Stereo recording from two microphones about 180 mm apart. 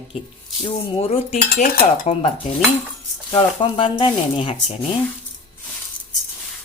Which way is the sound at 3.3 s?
25° left (ahead or behind).